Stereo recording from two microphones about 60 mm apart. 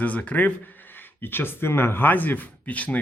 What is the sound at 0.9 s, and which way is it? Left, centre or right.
A man's voice, left.